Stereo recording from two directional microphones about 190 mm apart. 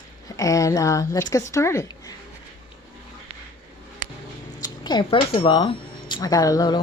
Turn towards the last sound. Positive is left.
turn(degrees=20)  # may be behind; listen again after turning